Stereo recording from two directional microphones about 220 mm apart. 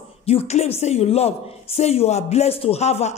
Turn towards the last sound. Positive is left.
turn(degrees=30)  # may be behind; listen again after turning